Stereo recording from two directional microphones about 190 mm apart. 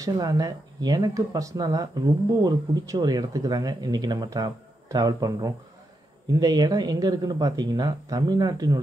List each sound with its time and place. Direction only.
0.0 s speech: 20° right (ahead or behind)